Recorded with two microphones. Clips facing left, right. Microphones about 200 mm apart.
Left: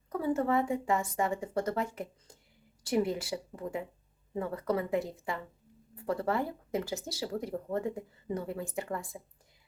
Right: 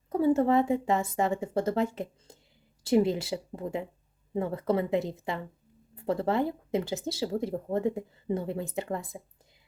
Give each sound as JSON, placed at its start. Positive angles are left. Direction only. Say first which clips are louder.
{"t": 0.1, "sound": "speech", "louder": "right 6 dB", "side_deg": -25}